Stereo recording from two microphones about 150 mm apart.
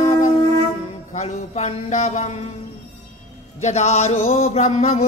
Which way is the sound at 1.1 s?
50° left (ahead or behind).